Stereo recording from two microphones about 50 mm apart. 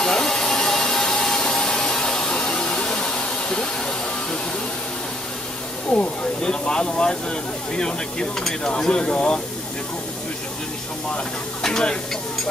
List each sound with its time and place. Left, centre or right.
0.0 s a sound: centre
5.9 s speech: centre
11.6 s speech: centre